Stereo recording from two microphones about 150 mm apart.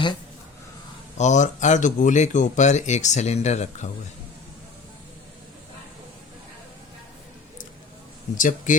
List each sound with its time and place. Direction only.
1.2 s speech: 55° left (ahead or behind)
8.4 s speech: 60° left (ahead or behind)